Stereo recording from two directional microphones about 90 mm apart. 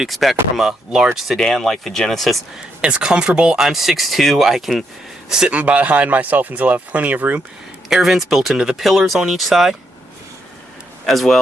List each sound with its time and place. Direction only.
0.0 s speech: centre (ahead or behind)
2.8 s speech: 10° right (ahead or behind)
7.9 s speech: 5° right (ahead or behind)
11.0 s a man's voice: centre (ahead or behind)